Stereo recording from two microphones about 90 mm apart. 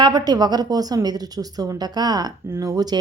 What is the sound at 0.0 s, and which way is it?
Speech, 50° right (ahead or behind).